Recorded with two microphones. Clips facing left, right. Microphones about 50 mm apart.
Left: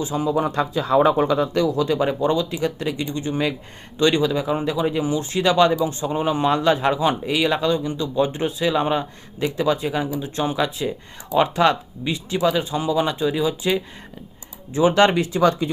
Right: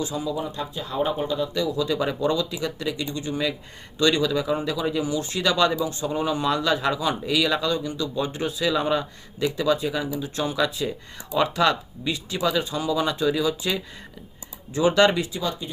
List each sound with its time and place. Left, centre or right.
0.0 s speech: left
0.3 s speech: left
1.5 s speech: left
15.4 s speech: left